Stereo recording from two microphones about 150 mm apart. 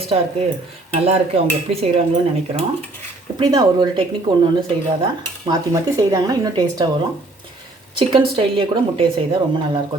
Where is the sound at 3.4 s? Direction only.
25° right (ahead or behind).